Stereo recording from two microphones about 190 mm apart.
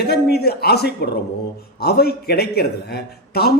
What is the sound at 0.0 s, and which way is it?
A man's voice, 55° left (ahead or behind).